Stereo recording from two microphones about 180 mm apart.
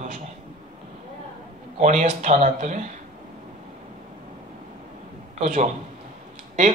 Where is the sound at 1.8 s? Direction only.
45° right (ahead or behind).